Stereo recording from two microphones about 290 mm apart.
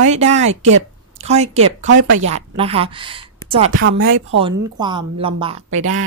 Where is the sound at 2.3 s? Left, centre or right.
Centre.